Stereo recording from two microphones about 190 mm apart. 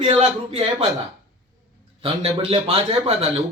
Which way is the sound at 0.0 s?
30° right (ahead or behind).